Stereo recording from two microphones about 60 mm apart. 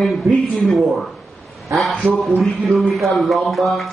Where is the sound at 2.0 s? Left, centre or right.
Right.